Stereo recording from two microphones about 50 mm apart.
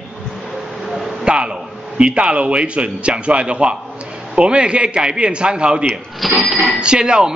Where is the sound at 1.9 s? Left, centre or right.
Right.